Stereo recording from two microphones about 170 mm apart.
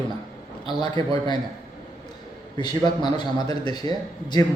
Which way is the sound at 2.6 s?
25° left (ahead or behind).